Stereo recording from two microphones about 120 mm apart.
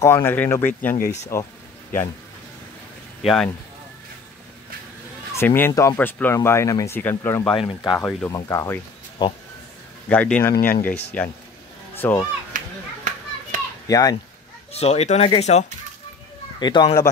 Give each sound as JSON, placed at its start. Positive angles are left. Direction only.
{"t": 0.0, "sound": "speech", "side_deg": 20}
{"t": 3.2, "sound": "speech", "side_deg": 0}
{"t": 5.3, "sound": "speech", "side_deg": 20}
{"t": 5.9, "sound": "speech", "side_deg": 15}
{"t": 7.5, "sound": "speech", "side_deg": 45}
{"t": 8.0, "sound": "speech", "side_deg": 10}
{"t": 8.3, "sound": "speech", "side_deg": 30}
{"t": 9.2, "sound": "speech", "side_deg": 40}
{"t": 10.0, "sound": "speech", "side_deg": 10}
{"t": 12.5, "sound": "children playing", "side_deg": -90}
{"t": 13.8, "sound": "speech", "side_deg": 30}
{"t": 14.7, "sound": "speech", "side_deg": 60}
{"t": 16.5, "sound": "speech", "side_deg": 40}